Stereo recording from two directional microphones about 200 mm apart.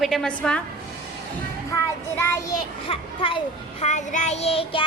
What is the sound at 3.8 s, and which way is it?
Child singing, 35° left (ahead or behind).